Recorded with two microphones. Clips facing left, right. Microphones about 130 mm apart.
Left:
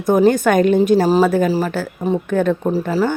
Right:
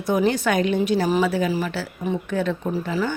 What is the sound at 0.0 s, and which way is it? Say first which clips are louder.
Speech: left 7 dB; 45° left (ahead or behind).